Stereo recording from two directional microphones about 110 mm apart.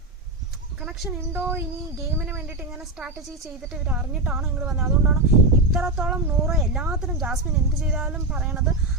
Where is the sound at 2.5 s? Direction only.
5° right (ahead or behind).